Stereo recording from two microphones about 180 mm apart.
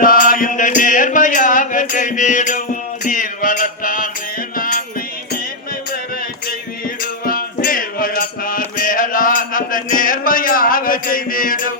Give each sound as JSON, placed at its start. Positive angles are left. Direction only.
{"t": 0.0, "sound": "music", "side_deg": 50}
{"t": 6.8, "sound": "music", "side_deg": 50}